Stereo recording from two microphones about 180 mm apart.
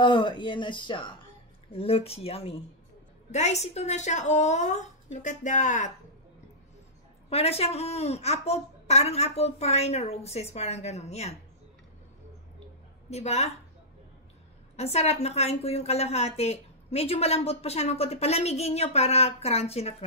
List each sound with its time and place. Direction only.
0.0 s a woman's voice: 25° left (ahead or behind); by 5.9 s 45° left (ahead or behind)
7.2 s a woman's voice: 35° left (ahead or behind)
13.1 s a woman's voice: 35° left (ahead or behind)
14.8 s a woman's voice: 35° left (ahead or behind)